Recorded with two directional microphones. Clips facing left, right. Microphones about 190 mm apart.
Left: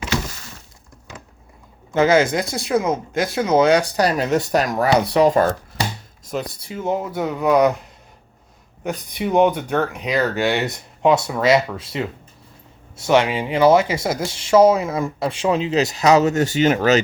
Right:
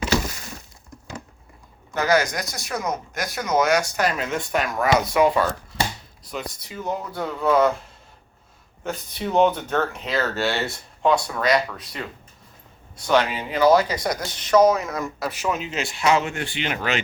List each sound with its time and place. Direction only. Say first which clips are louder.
1.9 s speech: left 6 dB; 25° left (ahead or behind); by 6.4 s 45° left (ahead or behind)
6.7 s speech: left 6 dB; 20° left (ahead or behind)
8.8 s speech: left 4 dB; 15° left (ahead or behind); by 17.0 s 40° left (ahead or behind)